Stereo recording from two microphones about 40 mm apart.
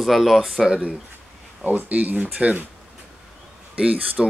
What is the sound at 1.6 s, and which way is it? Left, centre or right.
Speech, right.